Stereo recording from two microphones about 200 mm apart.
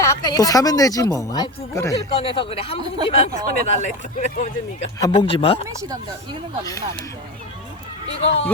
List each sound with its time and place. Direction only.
0.0 s speech: 15° left (ahead or behind)
2.2 s speech: 25° left (ahead or behind)
4.9 s speech: 20° left (ahead or behind)
8.2 s speech: 30° left (ahead or behind)